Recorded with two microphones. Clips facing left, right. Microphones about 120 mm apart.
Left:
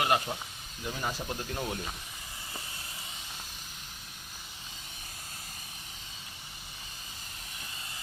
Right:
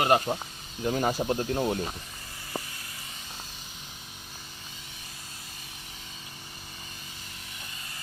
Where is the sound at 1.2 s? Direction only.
30° right (ahead or behind).